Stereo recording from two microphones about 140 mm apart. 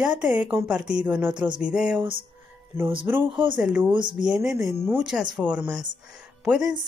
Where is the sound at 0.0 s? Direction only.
5° right (ahead or behind).